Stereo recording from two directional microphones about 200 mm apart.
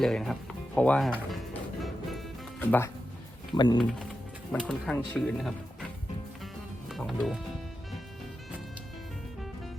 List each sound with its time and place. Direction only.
0.0 s speech: centre (ahead or behind)
1.8 s music: centre (ahead or behind)
3.5 s speech: 20° left (ahead or behind)
4.5 s speech: centre (ahead or behind)
6.4 s music: centre (ahead or behind)